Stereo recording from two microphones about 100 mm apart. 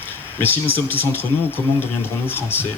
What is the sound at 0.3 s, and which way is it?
Speech, 20° left (ahead or behind).